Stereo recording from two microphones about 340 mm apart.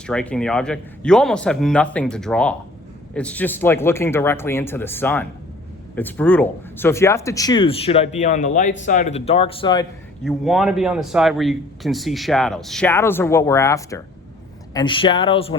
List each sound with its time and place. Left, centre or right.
0.1 s a man's voice: centre
10.2 s a man's voice: centre